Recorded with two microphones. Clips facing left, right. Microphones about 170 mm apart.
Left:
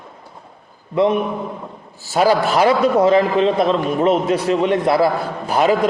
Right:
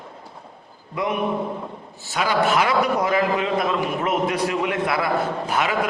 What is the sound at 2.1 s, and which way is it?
A man's voice, 40° left (ahead or behind).